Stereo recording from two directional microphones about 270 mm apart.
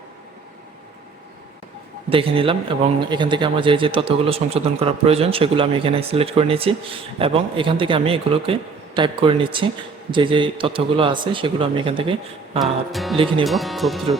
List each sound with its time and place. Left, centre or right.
2.0 s a man's voice: centre
12.6 s speech: centre
13.1 s a man's voice: centre
13.4 s speech: centre